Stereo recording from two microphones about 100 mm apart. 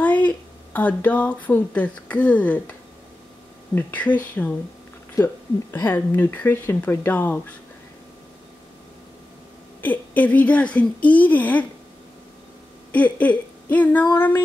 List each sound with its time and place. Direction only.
0.0 s speech: 15° left (ahead or behind)
3.7 s a woman's voice: 15° left (ahead or behind)
5.2 s speech: 35° left (ahead or behind)
5.9 s speech: 20° left (ahead or behind)
9.8 s a woman's voice: 15° left (ahead or behind)
12.9 s a woman's voice: 15° left (ahead or behind)